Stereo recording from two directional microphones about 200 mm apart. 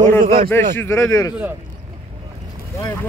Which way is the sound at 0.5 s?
10° left (ahead or behind).